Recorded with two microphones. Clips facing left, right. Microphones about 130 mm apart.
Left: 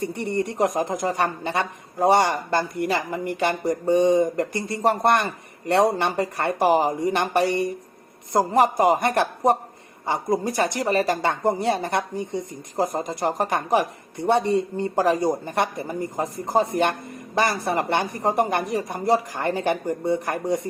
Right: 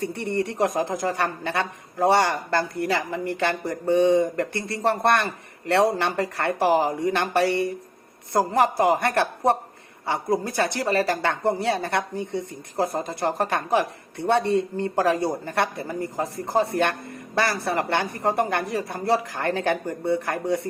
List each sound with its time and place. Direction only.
0.0 s a woman's voice: 15° left (ahead or behind)